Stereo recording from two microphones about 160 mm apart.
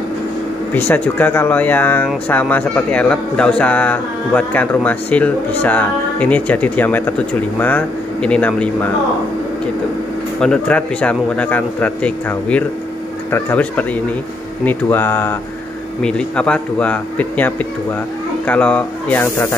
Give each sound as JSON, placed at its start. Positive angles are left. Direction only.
{"t": 0.7, "sound": "a man's voice", "side_deg": 10}
{"t": 10.4, "sound": "a man's voice", "side_deg": 5}